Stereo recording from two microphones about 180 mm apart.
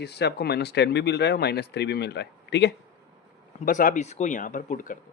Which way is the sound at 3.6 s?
45° left (ahead or behind).